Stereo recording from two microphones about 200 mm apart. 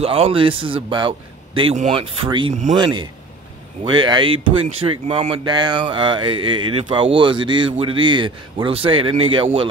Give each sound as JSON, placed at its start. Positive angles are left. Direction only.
{"t": 0.0, "sound": "speech", "side_deg": -30}